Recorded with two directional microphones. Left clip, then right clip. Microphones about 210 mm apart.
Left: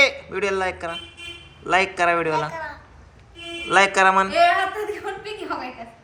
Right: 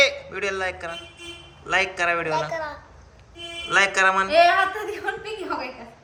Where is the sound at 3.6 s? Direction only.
Centre (ahead or behind).